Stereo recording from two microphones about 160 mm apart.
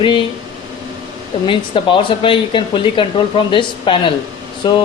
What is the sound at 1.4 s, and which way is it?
Speech, 35° left (ahead or behind).